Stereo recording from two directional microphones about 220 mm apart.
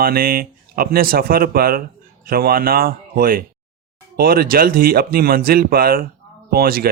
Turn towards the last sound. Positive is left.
turn(degrees=-40)  # may be behind; listen again after turning